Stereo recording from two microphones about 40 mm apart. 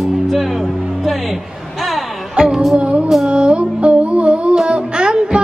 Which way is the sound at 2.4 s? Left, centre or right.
Centre.